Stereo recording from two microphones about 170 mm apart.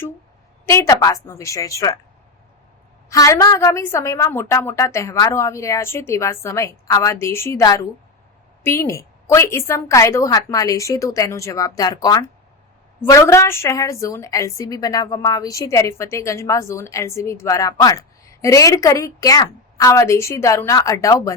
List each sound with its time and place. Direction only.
0.6 s a woman's voice: 15° left (ahead or behind)
3.1 s a woman's voice: 20° left (ahead or behind)